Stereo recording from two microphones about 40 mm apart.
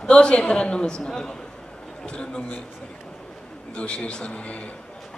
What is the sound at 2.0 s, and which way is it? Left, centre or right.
Speech, left.